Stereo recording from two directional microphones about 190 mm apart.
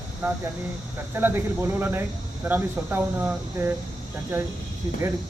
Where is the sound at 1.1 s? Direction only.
10° right (ahead or behind).